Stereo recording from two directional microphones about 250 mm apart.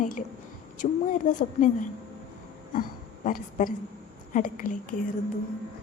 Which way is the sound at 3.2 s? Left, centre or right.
Left.